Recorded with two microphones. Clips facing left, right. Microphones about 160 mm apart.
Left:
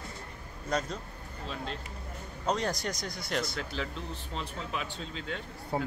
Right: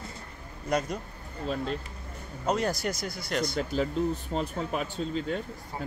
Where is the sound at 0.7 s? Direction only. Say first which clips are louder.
Right 4 dB; 10° right (ahead or behind).